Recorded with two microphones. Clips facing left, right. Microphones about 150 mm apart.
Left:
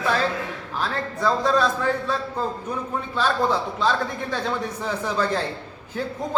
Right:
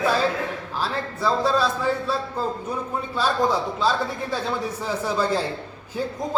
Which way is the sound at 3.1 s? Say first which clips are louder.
Even; 10° right (ahead or behind).